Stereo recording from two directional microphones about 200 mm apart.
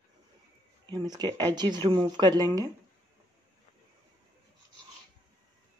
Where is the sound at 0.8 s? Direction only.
20° right (ahead or behind).